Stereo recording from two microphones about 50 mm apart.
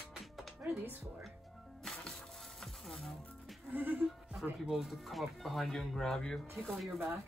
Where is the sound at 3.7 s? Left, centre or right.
Right.